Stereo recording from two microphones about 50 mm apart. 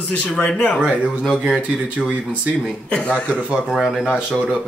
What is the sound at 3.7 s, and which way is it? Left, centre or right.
Speech, centre.